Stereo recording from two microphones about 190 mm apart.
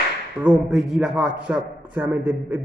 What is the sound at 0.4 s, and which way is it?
A man's voice, 5° right (ahead or behind).